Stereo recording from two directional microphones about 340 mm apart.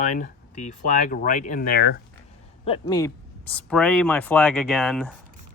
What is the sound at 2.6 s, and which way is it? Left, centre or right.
Speech, centre.